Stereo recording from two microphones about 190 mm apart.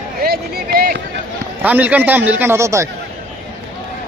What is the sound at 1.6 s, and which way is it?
A man's voice, 10° right (ahead or behind).